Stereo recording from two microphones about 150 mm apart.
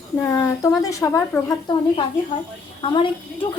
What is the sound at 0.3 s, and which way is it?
A woman's voice, 20° left (ahead or behind).